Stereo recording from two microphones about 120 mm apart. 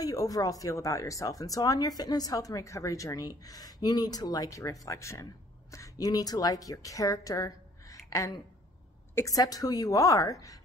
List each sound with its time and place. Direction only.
0.0 s a woman's voice: 30° left (ahead or behind)